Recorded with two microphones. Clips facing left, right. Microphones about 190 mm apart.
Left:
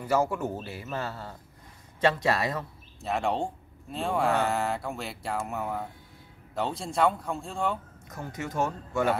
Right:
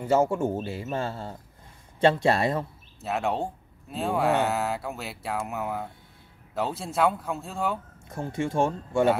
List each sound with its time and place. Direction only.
0.0 s speech: 25° right (ahead or behind)
3.0 s speech: 5° right (ahead or behind)
8.1 s speech: 30° right (ahead or behind)